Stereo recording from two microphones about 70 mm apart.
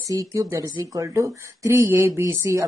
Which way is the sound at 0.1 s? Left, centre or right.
Right.